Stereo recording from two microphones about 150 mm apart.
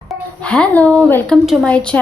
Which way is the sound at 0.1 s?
5° left (ahead or behind).